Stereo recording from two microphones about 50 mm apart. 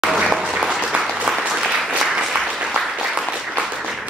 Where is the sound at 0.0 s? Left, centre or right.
Centre.